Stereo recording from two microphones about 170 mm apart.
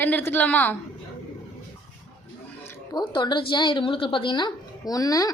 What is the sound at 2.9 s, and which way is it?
A woman's voice, 25° left (ahead or behind).